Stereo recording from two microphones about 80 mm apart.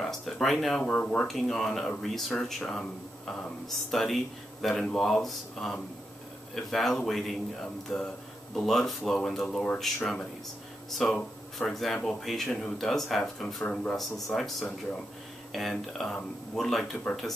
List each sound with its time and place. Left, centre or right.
0.0 s speech: centre
0.8 s speech: centre
10.9 s speech: centre
13.6 s speech: left
14.3 s speech: centre